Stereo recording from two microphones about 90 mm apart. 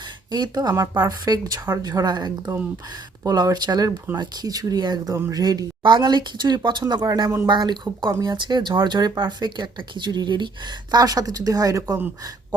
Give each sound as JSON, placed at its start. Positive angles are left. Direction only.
{"t": 0.3, "sound": "speech", "side_deg": -55}
{"t": 0.7, "sound": "speech", "side_deg": -40}